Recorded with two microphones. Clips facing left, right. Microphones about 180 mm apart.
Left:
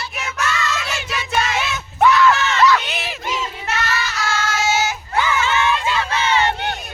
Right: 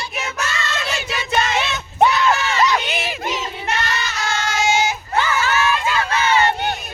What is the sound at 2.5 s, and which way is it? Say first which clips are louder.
Crowd: left 3 dB; 20° right (ahead or behind).